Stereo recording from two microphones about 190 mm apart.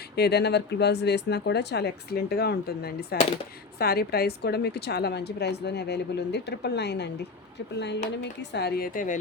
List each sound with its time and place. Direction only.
0.2 s a woman's voice: 60° left (ahead or behind); by 9.1 s 45° left (ahead or behind)